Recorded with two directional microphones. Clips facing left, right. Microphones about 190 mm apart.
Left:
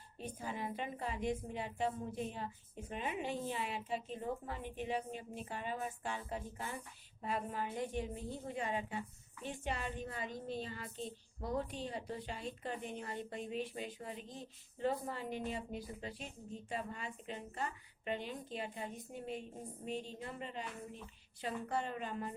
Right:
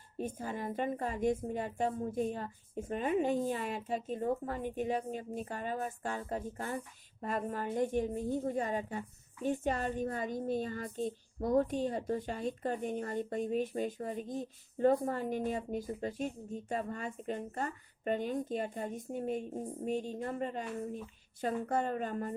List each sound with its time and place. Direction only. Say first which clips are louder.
0.2 s a woman's voice: right 5 dB; 45° right (ahead or behind)